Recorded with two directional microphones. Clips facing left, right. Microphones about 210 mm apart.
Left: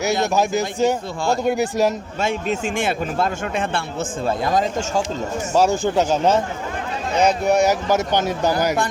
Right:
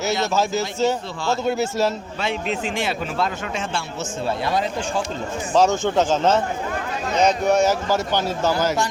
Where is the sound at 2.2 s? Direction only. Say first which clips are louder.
Left 3 dB; 45° left (ahead or behind).